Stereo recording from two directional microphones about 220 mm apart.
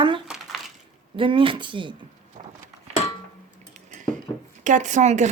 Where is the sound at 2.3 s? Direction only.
40° right (ahead or behind).